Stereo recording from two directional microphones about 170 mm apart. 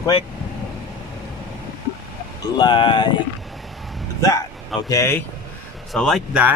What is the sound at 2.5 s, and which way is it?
Speech, 30° left (ahead or behind).